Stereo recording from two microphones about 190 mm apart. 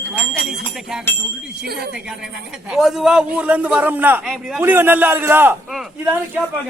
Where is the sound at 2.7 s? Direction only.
Centre (ahead or behind).